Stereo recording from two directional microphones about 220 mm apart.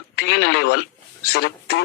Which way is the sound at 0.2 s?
45° left (ahead or behind).